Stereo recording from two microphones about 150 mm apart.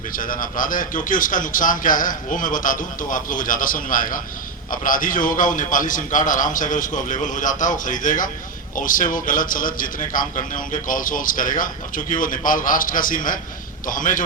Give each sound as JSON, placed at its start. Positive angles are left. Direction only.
{"t": 0.2, "sound": "a man's voice", "side_deg": 65}